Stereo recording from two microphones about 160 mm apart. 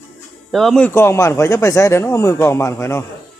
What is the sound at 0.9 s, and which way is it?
Speech, 15° left (ahead or behind).